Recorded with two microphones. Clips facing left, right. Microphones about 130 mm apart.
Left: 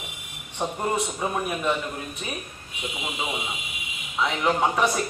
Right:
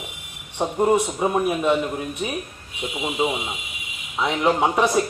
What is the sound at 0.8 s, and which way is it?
Speech, 20° right (ahead or behind).